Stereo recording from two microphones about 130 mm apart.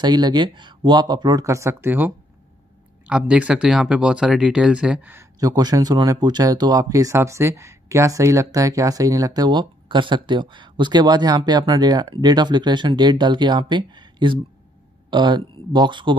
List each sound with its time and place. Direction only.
0.0 s speech: 35° right (ahead or behind); by 5.1 s 10° right (ahead or behind)
5.1 s speech: 30° right (ahead or behind)